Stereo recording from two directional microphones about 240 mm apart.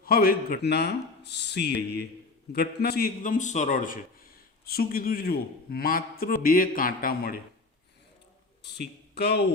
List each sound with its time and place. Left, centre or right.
0.0 s a man's voice: left
8.6 s speech: left